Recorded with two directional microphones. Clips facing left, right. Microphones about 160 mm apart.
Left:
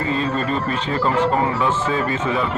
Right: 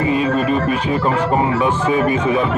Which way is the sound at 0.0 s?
15° right (ahead or behind).